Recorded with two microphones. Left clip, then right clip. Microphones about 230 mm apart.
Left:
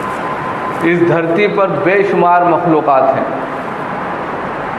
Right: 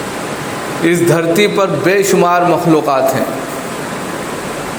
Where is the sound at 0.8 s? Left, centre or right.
Right.